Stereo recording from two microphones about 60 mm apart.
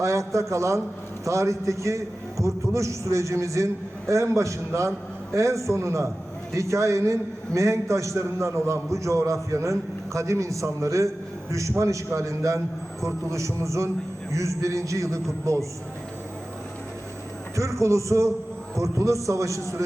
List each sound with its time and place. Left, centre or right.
0.0 s a man's voice: right
17.5 s a man's voice: right